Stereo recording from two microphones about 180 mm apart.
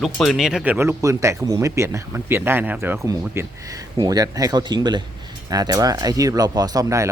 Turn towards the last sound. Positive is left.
turn(degrees=-20)  # may be behind; listen again after turning